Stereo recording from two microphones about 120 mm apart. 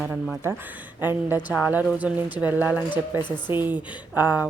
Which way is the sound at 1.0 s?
15° right (ahead or behind).